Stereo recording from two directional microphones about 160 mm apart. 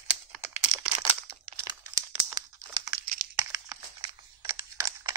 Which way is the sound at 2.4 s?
25° right (ahead or behind).